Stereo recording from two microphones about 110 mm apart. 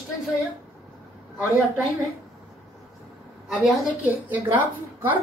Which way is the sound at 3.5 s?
Centre (ahead or behind).